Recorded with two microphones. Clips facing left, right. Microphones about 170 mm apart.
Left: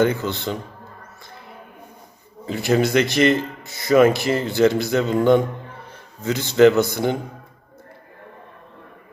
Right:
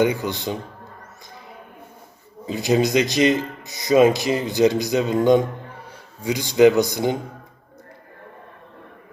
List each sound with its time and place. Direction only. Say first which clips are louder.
0.0 s speech: left 1 dB; 15° right (ahead or behind)
2.5 s a man's voice: even; 15° right (ahead or behind)